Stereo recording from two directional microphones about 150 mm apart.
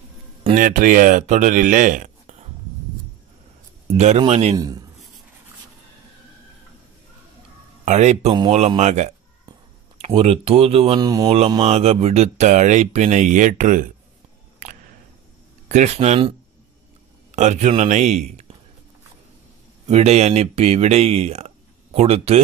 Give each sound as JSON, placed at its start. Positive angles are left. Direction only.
{"t": 0.6, "sound": "speech", "side_deg": -60}
{"t": 3.9, "sound": "a sound", "side_deg": -50}
{"t": 4.3, "sound": "speech", "side_deg": -45}
{"t": 4.6, "sound": "speech", "side_deg": -25}
{"t": 7.8, "sound": "speech", "side_deg": -50}
{"t": 11.0, "sound": "speech", "side_deg": -25}
{"t": 11.2, "sound": "speech", "side_deg": -40}
{"t": 14.6, "sound": "a sound", "side_deg": -55}
{"t": 15.7, "sound": "speech", "side_deg": -50}
{"t": 17.4, "sound": "speech", "side_deg": -50}
{"t": 19.9, "sound": "speech", "side_deg": -45}